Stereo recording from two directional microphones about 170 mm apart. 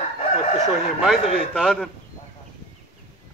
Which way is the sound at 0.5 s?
Centre (ahead or behind).